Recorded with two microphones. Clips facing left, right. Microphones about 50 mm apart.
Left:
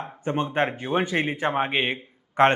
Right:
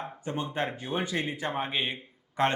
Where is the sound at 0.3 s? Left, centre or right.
Left.